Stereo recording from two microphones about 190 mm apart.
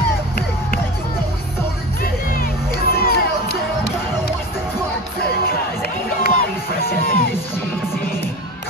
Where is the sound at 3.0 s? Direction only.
55° left (ahead or behind).